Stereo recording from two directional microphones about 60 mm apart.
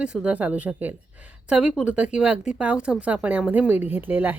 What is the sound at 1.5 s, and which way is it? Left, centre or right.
Speech, centre.